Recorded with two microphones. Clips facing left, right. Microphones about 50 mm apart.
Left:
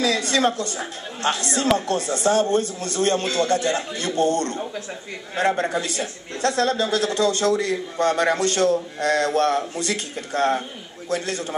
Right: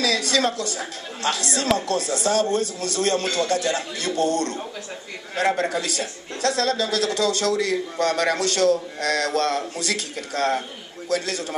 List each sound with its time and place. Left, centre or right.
0.0 s a woman's voice: left